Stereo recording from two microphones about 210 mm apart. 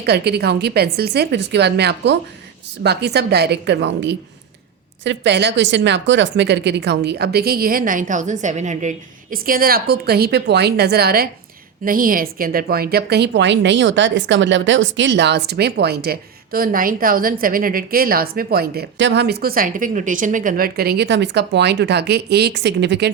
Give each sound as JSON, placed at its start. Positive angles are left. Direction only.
{"t": 0.0, "sound": "a woman's voice", "side_deg": -50}